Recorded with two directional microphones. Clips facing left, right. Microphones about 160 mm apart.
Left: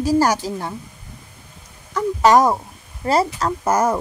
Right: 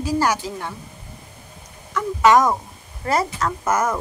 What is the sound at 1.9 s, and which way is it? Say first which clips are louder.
Speech: left 1 dB; 35° left (ahead or behind).